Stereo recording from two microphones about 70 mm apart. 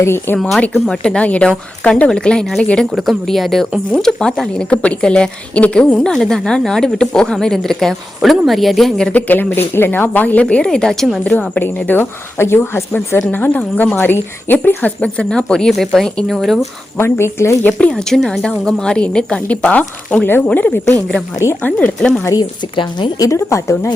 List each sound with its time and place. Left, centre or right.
0.0 s speech: left
0.7 s a woman's voice: centre
2.9 s a woman's voice: centre
9.1 s a woman's voice: left
11.2 s a woman's voice: left; by 16.6 s centre
17.0 s speech: left
17.6 s a woman's voice: centre
23.0 s a woman's voice: left